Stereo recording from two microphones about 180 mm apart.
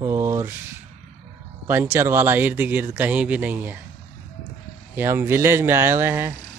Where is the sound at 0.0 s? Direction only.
15° right (ahead or behind).